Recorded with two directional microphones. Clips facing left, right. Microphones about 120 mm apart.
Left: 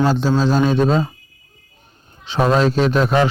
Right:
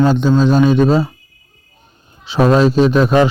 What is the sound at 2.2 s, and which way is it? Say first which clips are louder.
Speech: right 4 dB; 15° right (ahead or behind).